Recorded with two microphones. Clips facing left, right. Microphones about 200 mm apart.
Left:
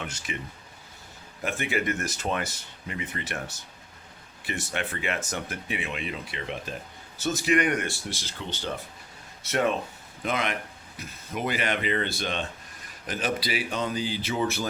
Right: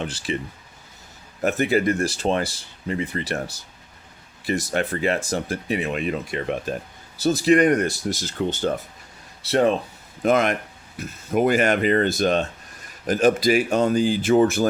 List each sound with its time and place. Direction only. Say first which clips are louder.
0.0 s speech: right 8 dB; 30° right (ahead or behind)
1.4 s speech: right 9 dB; 40° right (ahead or behind)
9.4 s speech: right 7 dB; 35° right (ahead or behind)
10.2 s speech: right 10 dB; 45° right (ahead or behind)